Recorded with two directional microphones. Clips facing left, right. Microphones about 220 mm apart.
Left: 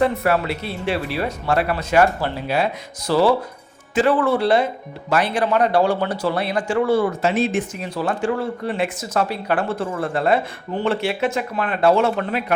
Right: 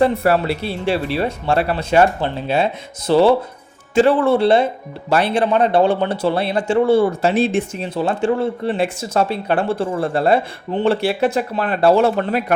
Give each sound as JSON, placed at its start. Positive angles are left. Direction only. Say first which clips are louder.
{"t": 0.0, "sound": "speech", "louder": "right 3 dB", "side_deg": -30}